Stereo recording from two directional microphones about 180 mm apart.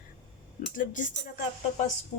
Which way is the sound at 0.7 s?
45° left (ahead or behind).